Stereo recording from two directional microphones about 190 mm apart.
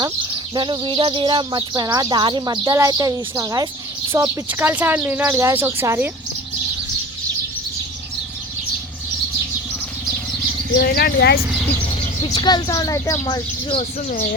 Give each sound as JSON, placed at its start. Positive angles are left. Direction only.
{"t": 0.5, "sound": "speech", "side_deg": -25}
{"t": 10.8, "sound": "speech", "side_deg": 55}
{"t": 12.2, "sound": "speech", "side_deg": 25}